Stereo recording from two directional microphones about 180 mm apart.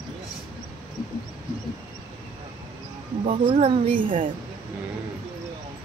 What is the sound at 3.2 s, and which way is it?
Speech, 30° right (ahead or behind).